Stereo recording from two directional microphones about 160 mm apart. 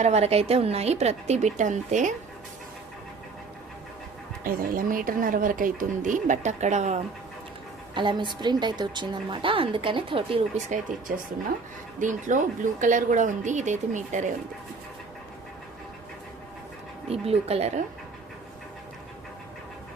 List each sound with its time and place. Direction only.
0.0 s speech: 40° right (ahead or behind)
4.4 s speech: 60° right (ahead or behind)
7.9 s speech: 30° right (ahead or behind)
11.9 s speech: 50° right (ahead or behind)
17.1 s speech: 40° right (ahead or behind)